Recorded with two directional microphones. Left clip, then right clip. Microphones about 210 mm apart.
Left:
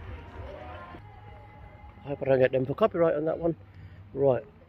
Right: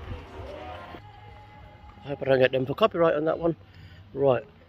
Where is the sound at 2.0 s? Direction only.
20° right (ahead or behind).